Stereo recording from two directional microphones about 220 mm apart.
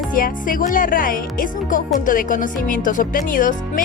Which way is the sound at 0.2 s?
40° left (ahead or behind).